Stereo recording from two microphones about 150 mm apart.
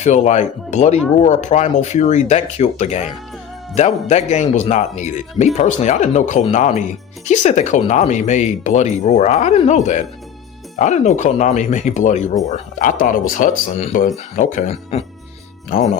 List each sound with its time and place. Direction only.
0.0 s speech: 50° left (ahead or behind)
14.7 s speech: 40° left (ahead or behind)